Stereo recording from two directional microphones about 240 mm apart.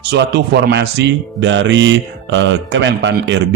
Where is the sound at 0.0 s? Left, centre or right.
Right.